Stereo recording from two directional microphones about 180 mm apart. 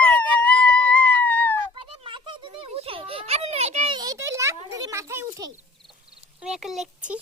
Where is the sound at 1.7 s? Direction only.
30° right (ahead or behind).